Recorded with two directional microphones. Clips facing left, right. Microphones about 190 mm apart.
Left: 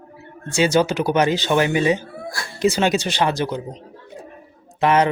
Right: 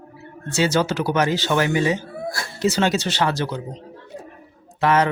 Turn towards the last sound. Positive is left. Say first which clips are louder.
# left 2 dB
turn(degrees=20)  # may be behind; listen again after turning